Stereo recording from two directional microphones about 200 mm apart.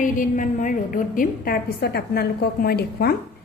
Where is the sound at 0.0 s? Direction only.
40° left (ahead or behind).